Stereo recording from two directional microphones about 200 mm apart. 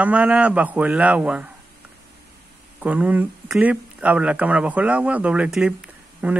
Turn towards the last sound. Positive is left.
turn(degrees=-5)  # may be behind; listen again after turning